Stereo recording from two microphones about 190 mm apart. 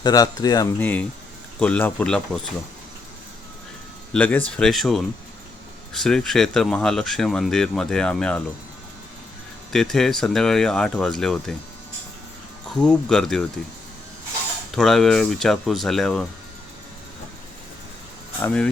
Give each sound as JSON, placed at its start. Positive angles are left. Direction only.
{"t": 0.0, "sound": "speech", "side_deg": 20}
{"t": 0.8, "sound": "speech", "side_deg": 10}
{"t": 4.1, "sound": "speech", "side_deg": 10}
{"t": 9.7, "sound": "speech", "side_deg": 0}
{"t": 12.7, "sound": "speech", "side_deg": 5}
{"t": 14.8, "sound": "speech", "side_deg": 0}
{"t": 18.4, "sound": "speech", "side_deg": 5}